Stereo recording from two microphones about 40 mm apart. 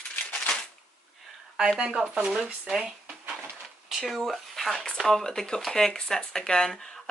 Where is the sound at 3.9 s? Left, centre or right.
Centre.